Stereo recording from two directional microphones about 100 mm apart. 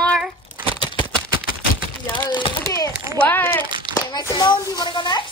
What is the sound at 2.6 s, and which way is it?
Speech, 30° left (ahead or behind).